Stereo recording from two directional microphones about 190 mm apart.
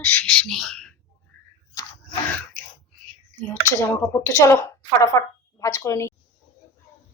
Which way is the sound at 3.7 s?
15° left (ahead or behind).